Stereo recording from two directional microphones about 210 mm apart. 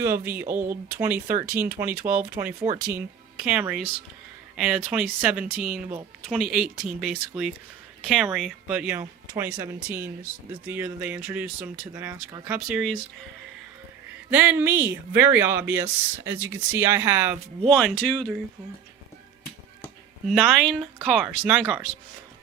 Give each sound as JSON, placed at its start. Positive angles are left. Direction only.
{"t": 0.0, "sound": "speech", "side_deg": -10}
{"t": 14.3, "sound": "speech", "side_deg": -10}
{"t": 17.7, "sound": "speech", "side_deg": 5}
{"t": 19.8, "sound": "speech", "side_deg": 0}